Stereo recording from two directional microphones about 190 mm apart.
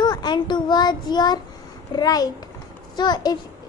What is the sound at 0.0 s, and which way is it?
A child's voice, 20° left (ahead or behind).